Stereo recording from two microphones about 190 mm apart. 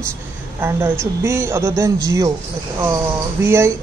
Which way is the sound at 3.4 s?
15° right (ahead or behind).